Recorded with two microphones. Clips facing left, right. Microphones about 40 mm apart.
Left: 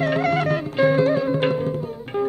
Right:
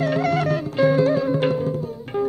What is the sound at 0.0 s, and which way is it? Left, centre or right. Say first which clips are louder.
Music: even; left.